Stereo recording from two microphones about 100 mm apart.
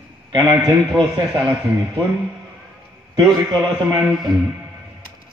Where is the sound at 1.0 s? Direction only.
40° right (ahead or behind).